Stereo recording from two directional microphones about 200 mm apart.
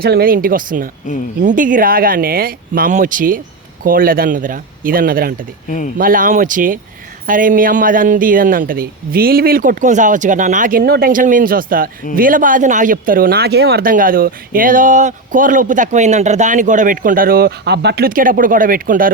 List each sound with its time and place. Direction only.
0.0 s speech: 50° right (ahead or behind)
5.6 s speech: 40° left (ahead or behind)
6.0 s speech: 45° right (ahead or behind)